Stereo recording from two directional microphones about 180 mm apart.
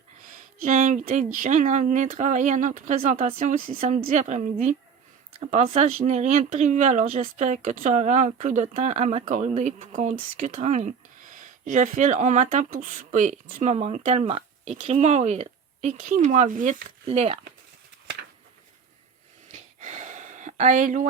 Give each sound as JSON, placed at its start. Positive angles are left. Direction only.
{"t": 0.6, "sound": "speech", "side_deg": -45}
{"t": 5.5, "sound": "speech", "side_deg": -40}
{"t": 17.1, "sound": "speech", "side_deg": -30}
{"t": 19.5, "sound": "a sound", "side_deg": -40}